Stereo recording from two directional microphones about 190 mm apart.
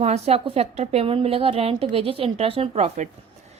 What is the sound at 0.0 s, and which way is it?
A woman's voice, 35° right (ahead or behind).